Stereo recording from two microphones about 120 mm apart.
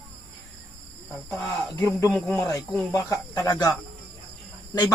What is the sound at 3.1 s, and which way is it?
Speech, 30° left (ahead or behind).